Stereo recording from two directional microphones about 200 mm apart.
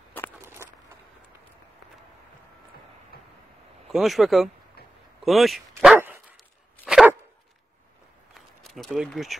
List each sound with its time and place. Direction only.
3.1 s vehicle: 50° left (ahead or behind)
3.9 s speech: centre (ahead or behind)
5.2 s dog: centre (ahead or behind)
8.4 s speech: centre (ahead or behind)